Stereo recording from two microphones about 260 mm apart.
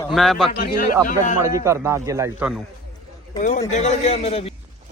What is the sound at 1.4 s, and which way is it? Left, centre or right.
Speech, centre.